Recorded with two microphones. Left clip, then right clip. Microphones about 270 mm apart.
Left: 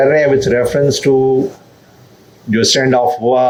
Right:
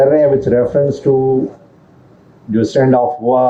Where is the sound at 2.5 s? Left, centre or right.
Left.